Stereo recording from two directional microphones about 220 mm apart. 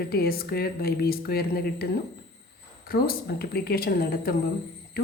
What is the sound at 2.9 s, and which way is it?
Speech, 45° left (ahead or behind).